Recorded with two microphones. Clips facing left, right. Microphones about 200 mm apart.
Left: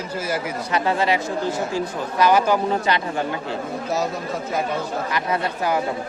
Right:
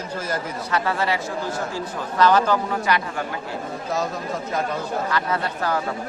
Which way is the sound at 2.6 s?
25° left (ahead or behind).